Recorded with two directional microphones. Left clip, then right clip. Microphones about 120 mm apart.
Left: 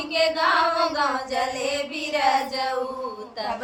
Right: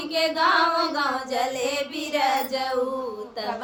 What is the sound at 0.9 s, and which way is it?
Female singing, 50° right (ahead or behind).